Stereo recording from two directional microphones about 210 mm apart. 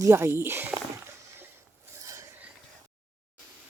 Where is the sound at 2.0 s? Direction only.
15° right (ahead or behind).